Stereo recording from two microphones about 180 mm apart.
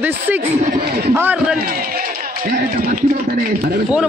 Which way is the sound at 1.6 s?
50° right (ahead or behind).